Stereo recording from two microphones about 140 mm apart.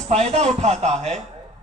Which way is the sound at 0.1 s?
50° right (ahead or behind).